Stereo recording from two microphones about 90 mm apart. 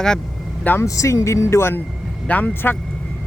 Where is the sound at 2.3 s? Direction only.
20° left (ahead or behind).